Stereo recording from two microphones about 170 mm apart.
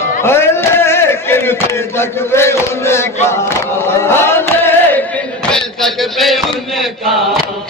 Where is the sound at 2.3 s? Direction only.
15° left (ahead or behind).